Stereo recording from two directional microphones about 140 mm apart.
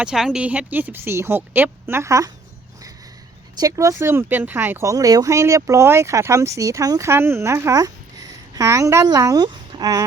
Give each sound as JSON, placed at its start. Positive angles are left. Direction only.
{"t": 0.0, "sound": "speech", "side_deg": -5}
{"t": 3.6, "sound": "speech", "side_deg": -25}